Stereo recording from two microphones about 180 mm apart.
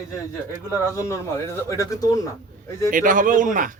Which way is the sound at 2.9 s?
50° right (ahead or behind).